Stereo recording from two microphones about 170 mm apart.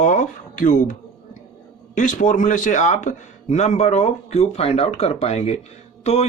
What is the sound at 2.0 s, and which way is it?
A man's voice, 50° left (ahead or behind).